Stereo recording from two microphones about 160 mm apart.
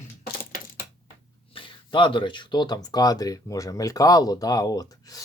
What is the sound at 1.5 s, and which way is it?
Speech, 30° left (ahead or behind).